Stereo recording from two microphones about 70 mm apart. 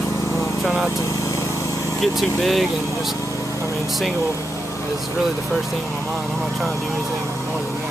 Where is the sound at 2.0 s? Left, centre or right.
Centre.